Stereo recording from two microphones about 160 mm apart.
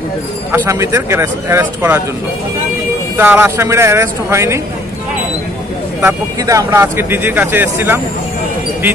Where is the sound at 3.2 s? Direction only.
15° right (ahead or behind).